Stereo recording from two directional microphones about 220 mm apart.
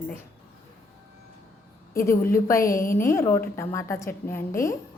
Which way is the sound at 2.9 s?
10° left (ahead or behind).